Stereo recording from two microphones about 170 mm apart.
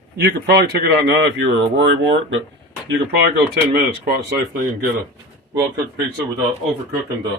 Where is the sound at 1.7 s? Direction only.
90° right.